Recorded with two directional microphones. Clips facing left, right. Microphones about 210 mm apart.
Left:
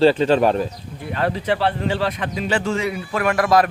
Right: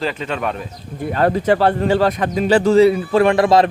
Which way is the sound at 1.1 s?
45° right (ahead or behind).